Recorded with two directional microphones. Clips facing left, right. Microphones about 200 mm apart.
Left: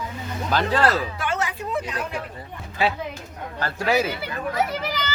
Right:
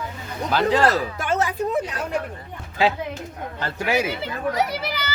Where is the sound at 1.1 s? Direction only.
40° right (ahead or behind).